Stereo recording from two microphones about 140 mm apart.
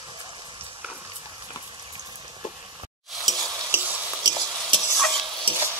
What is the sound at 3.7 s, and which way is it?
Stir, 10° right (ahead or behind).